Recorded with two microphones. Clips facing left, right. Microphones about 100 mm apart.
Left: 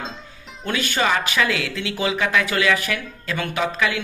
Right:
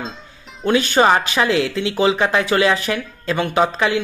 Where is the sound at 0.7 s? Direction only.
30° right (ahead or behind).